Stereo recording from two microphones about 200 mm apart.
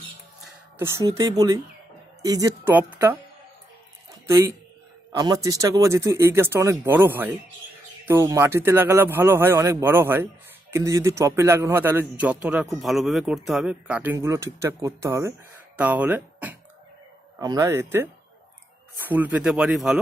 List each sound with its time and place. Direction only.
0.4 s a man's voice: 10° right (ahead or behind)
4.1 s a sound: 15° right (ahead or behind)
5.1 s a man's voice: 20° right (ahead or behind); by 20.0 s 5° right (ahead or behind)